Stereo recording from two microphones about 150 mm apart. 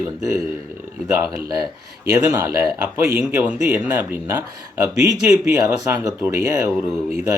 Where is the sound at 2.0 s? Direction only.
20° right (ahead or behind).